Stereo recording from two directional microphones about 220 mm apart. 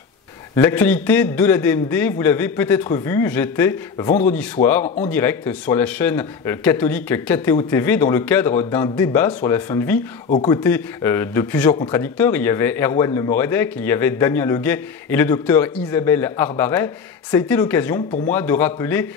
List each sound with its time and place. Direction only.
0.6 s speech: 10° left (ahead or behind)
4.8 s speech: 30° left (ahead or behind)
5.1 s speech: 10° left (ahead or behind)